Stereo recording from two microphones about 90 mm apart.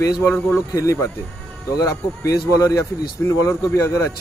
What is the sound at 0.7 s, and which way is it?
A man's voice, 35° left (ahead or behind).